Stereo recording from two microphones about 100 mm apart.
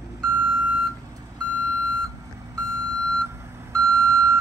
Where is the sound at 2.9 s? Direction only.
30° right (ahead or behind).